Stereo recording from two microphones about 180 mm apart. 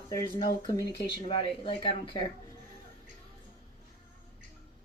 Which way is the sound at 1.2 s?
30° left (ahead or behind).